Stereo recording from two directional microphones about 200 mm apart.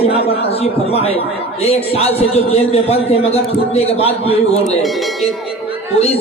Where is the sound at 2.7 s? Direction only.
30° left (ahead or behind).